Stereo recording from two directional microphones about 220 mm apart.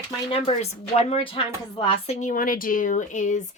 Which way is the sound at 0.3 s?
25° left (ahead or behind).